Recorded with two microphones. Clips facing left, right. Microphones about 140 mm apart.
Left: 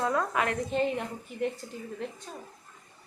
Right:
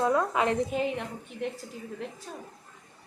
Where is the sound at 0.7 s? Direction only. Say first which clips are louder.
Left 1 dB; 5° right (ahead or behind).